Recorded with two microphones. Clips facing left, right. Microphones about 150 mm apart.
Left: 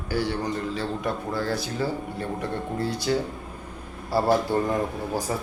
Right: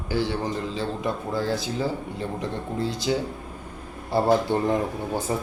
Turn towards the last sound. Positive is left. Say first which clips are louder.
# right 1 dB
turn(degrees=-25)  # may be behind; listen again after turning